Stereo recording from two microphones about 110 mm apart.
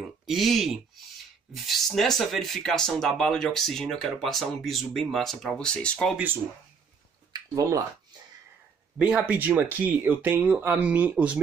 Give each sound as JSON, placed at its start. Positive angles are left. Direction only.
{"t": 0.3, "sound": "speech", "side_deg": 0}
{"t": 7.3, "sound": "a sound", "side_deg": -30}
{"t": 8.9, "sound": "speech", "side_deg": -10}